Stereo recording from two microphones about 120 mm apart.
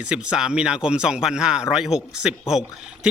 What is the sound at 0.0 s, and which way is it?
A man's voice, 10° right (ahead or behind).